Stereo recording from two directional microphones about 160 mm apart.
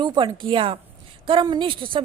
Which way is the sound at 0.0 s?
30° right (ahead or behind).